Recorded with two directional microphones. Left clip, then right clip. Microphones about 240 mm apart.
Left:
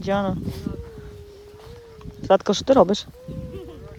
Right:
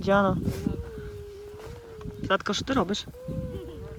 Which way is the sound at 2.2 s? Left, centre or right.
Centre.